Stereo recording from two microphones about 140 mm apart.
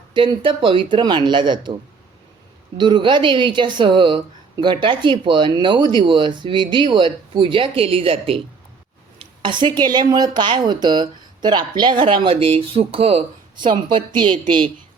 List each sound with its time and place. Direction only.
0.1 s a woman's voice: 35° right (ahead or behind)
2.7 s a woman's voice: 35° right (ahead or behind)
9.4 s a woman's voice: 35° right (ahead or behind)